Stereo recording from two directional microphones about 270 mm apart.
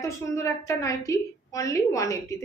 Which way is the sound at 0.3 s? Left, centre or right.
Centre.